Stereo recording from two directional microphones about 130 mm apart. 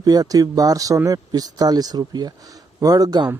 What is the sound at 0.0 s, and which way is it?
Speech, 30° right (ahead or behind).